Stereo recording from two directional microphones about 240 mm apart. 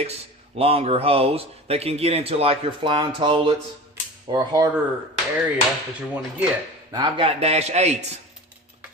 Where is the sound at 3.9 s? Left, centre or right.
Centre.